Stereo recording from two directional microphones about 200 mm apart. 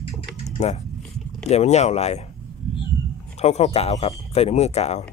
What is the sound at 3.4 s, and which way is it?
A man's voice, 30° left (ahead or behind).